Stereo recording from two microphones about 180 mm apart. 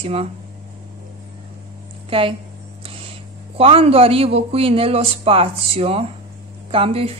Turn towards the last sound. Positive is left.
turn(degrees=-30)  # may be behind; listen again after turning